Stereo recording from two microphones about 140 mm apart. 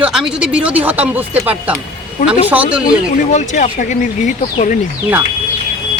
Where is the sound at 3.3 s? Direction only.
60° left (ahead or behind).